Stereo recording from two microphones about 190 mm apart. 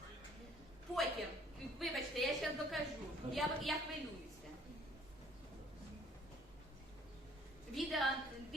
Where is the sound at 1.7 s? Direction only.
Centre (ahead or behind).